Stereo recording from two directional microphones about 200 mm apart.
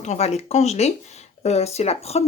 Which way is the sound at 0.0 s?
35° left (ahead or behind).